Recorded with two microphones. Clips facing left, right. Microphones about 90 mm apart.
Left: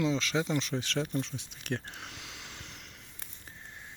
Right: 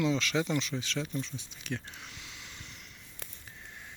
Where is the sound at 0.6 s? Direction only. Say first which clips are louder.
Left 2 dB; 50° left (ahead or behind).